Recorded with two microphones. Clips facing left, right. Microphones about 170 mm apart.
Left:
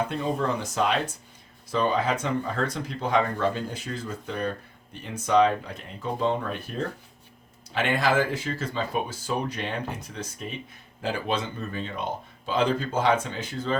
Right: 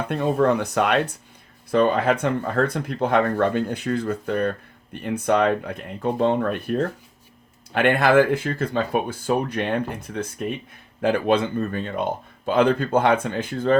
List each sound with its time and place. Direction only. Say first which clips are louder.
0.1 s speech: right 7 dB; 60° right (ahead or behind)